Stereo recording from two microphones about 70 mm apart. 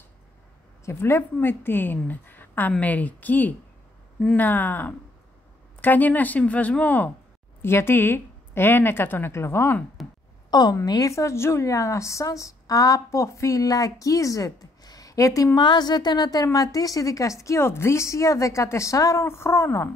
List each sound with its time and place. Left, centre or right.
0.8 s a woman's voice: left
7.6 s a woman's voice: left
10.0 s a sound: centre
10.5 s a woman's voice: left
10.9 s a woman's voice: left
15.5 s a woman's voice: left
16.5 s a woman's voice: left